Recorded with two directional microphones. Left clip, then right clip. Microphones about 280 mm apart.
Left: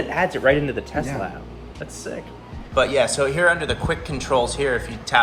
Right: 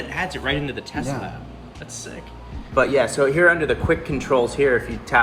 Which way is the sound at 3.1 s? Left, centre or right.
Left.